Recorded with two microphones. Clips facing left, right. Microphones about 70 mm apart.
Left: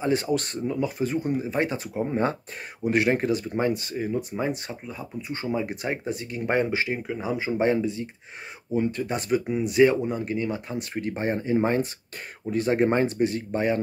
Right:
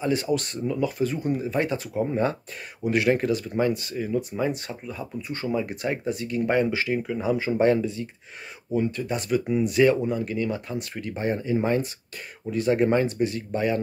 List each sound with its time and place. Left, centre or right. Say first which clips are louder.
0.0 s speech: even; left
7.1 s speech: right 3 dB; centre; by 13.7 s left